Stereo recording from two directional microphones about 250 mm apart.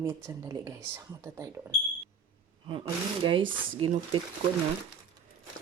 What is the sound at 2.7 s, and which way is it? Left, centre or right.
Speech, centre.